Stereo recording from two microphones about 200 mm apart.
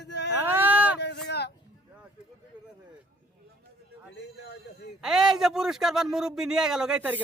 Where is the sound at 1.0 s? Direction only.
55° left (ahead or behind).